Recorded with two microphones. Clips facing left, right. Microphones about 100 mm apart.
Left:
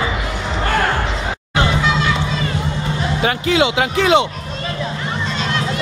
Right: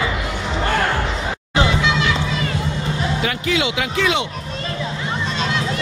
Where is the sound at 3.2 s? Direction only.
30° left (ahead or behind).